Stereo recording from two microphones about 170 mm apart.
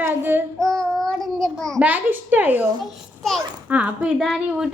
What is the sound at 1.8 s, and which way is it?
Speech, 10° right (ahead or behind).